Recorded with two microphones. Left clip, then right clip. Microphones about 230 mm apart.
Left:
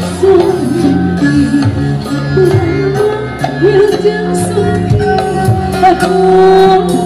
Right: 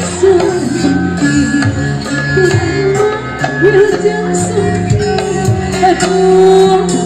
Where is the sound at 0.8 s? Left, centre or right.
Right.